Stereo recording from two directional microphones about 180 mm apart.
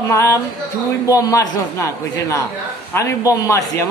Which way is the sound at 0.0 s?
15° left (ahead or behind).